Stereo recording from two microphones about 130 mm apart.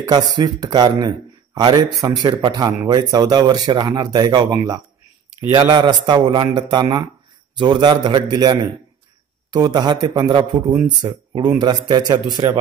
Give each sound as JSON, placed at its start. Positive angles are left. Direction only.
{"t": 0.0, "sound": "speech", "side_deg": -30}